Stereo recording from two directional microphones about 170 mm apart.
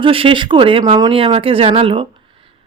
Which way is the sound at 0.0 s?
30° right (ahead or behind).